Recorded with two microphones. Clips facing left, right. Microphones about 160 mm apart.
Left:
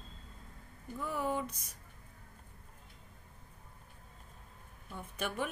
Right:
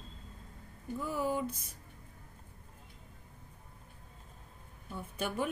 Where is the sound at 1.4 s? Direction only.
25° right (ahead or behind).